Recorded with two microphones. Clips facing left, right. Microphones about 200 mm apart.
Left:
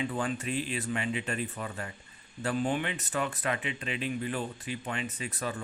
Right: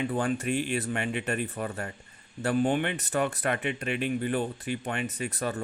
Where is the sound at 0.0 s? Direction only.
50° right (ahead or behind).